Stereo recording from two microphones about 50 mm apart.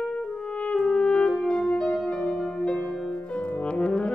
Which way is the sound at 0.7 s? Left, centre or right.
Centre.